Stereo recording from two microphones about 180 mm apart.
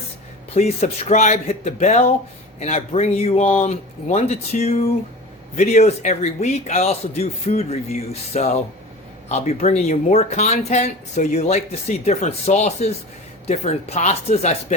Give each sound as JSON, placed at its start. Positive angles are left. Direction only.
{"t": 0.5, "sound": "speech", "side_deg": 35}